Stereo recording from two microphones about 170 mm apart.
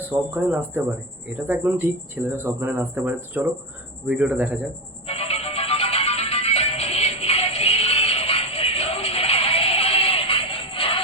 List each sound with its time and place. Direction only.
0.0 s speech: 10° right (ahead or behind)
5.0 s music: 35° left (ahead or behind)